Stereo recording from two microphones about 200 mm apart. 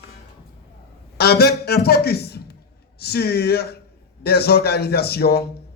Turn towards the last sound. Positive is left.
turn(degrees=50)  # may be behind; listen again after turning